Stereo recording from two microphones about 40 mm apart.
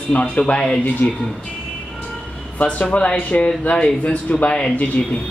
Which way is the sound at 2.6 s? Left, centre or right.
Left.